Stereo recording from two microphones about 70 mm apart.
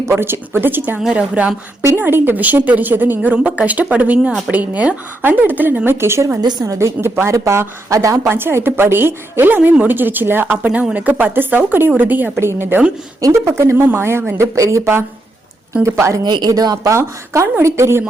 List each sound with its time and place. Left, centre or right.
0.1 s a woman's voice: right
0.9 s a woman's voice: centre
2.0 s a woman's voice: right
6.4 s speech: right
6.7 s a woman's voice: right
8.3 s a woman's voice: right
15.9 s a woman's voice: right
16.2 s speech: right
16.9 s speech: right